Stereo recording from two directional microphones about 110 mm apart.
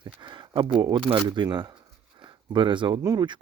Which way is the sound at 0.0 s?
45° right (ahead or behind).